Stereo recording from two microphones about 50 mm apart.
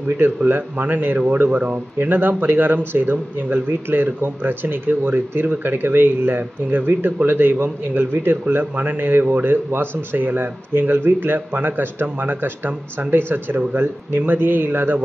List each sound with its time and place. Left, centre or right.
0.5 s speech: right